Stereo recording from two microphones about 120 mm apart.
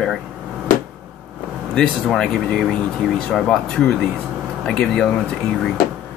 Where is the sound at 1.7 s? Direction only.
5° left (ahead or behind).